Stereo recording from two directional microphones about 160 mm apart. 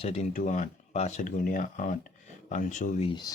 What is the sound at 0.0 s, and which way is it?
Speech, 40° left (ahead or behind).